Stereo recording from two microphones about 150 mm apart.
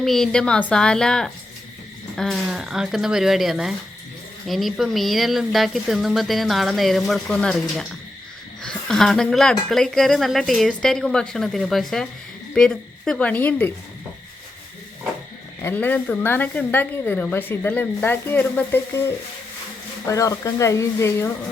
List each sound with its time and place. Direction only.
0.0 s a woman's voice: centre (ahead or behind)
15.6 s a woman's voice: 10° left (ahead or behind)
20.1 s speech: 20° left (ahead or behind)